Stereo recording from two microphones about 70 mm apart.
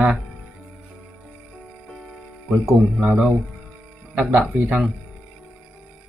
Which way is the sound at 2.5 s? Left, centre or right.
Centre.